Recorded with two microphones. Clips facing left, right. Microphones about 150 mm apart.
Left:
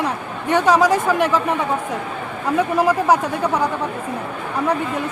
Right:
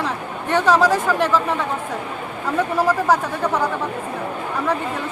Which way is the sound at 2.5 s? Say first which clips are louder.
Left 2 dB; 15° left (ahead or behind).